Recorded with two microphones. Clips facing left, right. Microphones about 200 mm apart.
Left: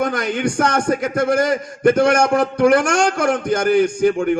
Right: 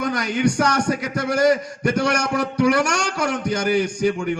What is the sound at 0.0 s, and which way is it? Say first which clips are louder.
A man's voice: left 1 dB; 50° left (ahead or behind).